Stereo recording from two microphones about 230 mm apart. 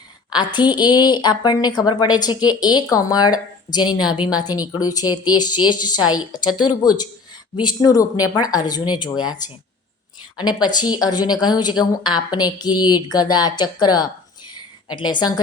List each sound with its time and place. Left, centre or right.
0.3 s a woman's voice: centre